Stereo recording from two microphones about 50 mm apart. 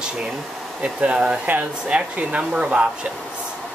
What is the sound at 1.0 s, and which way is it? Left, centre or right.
Speech, right.